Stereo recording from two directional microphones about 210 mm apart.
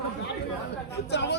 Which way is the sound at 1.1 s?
55° left (ahead or behind).